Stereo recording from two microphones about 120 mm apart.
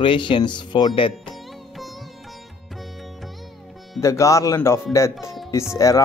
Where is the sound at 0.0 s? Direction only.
45° left (ahead or behind).